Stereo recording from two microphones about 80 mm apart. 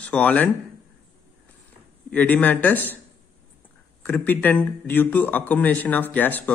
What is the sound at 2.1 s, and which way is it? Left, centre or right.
Speech, left.